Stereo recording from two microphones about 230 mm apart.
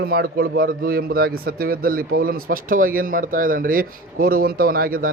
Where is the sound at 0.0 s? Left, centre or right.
Right.